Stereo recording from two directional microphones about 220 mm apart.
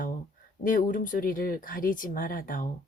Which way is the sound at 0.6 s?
35° left (ahead or behind).